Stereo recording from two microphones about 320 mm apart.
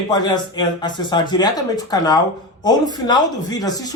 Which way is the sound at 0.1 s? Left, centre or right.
Centre.